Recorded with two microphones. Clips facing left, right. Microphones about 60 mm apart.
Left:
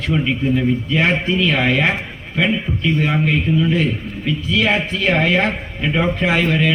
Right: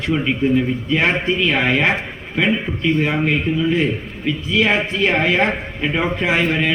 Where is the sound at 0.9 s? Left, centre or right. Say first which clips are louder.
Right 2 dB; centre.